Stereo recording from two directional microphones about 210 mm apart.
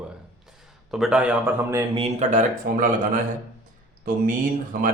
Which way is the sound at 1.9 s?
30° right (ahead or behind).